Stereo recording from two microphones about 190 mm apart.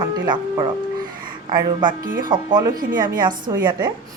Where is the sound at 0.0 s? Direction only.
20° right (ahead or behind).